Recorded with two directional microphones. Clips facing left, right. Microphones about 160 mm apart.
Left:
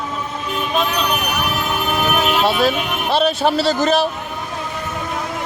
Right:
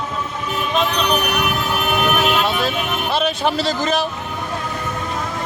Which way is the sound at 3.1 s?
35° left (ahead or behind).